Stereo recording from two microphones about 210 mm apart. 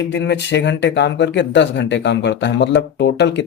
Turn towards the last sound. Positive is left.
turn(degrees=55)  # may be behind; listen again after turning